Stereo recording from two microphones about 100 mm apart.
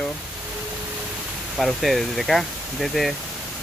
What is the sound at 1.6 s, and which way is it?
Speech, centre (ahead or behind).